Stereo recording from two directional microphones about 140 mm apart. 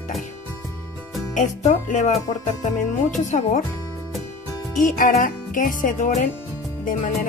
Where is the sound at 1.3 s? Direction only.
65° left (ahead or behind).